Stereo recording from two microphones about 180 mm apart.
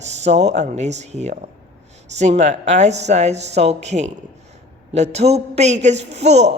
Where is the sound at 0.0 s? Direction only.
40° right (ahead or behind).